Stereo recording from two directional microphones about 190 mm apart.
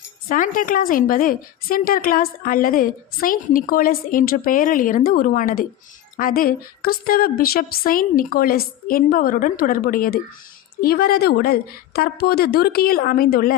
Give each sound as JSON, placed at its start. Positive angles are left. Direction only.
{"t": 0.3, "sound": "a woman's voice", "side_deg": 45}